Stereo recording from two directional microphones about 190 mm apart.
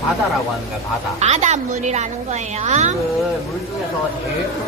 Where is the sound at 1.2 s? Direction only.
35° right (ahead or behind).